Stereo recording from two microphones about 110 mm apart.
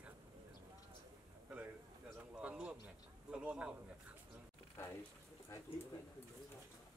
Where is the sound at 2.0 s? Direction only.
5° right (ahead or behind).